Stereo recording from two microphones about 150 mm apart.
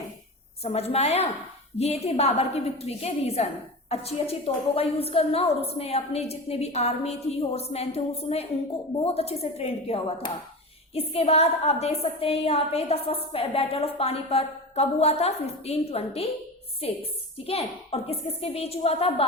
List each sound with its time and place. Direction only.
0.6 s a woman's voice: 45° left (ahead or behind)